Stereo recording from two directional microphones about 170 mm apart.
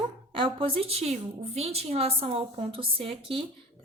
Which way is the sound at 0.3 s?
30° right (ahead or behind).